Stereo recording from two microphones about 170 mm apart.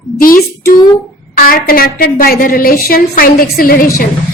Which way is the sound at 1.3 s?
55° left (ahead or behind).